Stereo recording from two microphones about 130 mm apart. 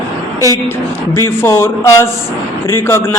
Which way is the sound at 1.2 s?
20° left (ahead or behind).